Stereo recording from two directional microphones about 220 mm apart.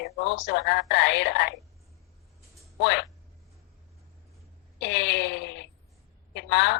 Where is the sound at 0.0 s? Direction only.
55° left (ahead or behind).